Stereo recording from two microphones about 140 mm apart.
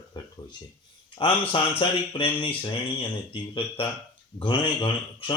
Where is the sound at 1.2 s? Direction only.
35° left (ahead or behind).